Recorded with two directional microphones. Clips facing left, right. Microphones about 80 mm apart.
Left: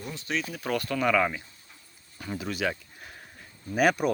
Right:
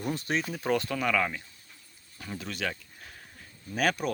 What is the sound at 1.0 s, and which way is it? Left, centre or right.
Speech, centre.